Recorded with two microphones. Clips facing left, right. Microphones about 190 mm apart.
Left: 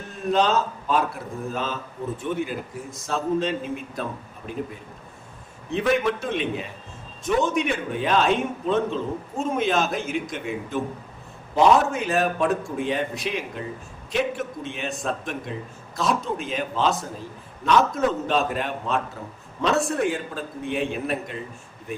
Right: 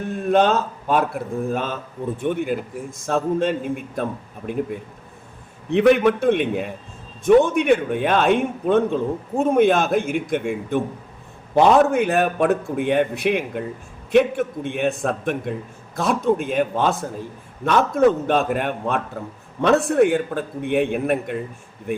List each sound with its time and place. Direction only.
0.3 s a man's voice: 55° right (ahead or behind)
5.7 s a man's voice: 65° right (ahead or behind)